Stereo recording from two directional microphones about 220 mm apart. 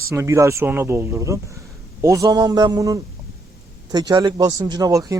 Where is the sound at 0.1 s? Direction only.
15° right (ahead or behind).